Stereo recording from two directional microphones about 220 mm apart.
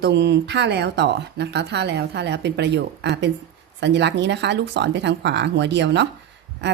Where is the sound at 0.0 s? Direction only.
50° right (ahead or behind).